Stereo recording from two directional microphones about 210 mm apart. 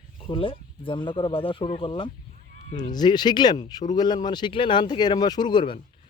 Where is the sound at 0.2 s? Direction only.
25° left (ahead or behind).